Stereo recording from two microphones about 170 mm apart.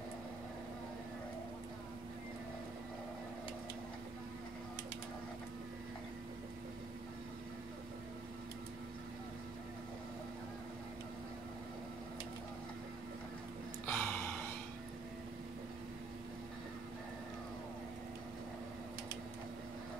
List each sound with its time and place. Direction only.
13.8 s gasp: 10° left (ahead or behind)